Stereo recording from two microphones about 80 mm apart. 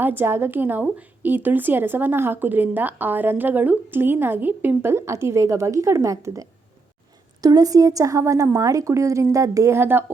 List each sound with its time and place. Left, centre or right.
0.0 s a woman's voice: right